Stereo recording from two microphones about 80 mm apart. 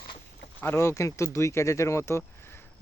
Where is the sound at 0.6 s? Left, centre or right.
Left.